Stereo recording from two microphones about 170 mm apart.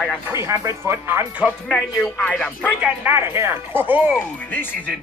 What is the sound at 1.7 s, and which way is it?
Speech, 5° left (ahead or behind).